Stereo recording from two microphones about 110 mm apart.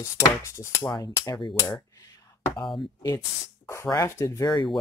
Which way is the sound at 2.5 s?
45° left (ahead or behind).